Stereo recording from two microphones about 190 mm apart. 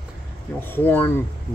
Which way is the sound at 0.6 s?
10° left (ahead or behind).